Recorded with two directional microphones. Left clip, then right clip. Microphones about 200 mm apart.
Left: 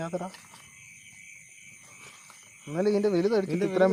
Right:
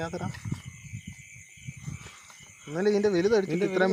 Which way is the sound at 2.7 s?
40° left (ahead or behind).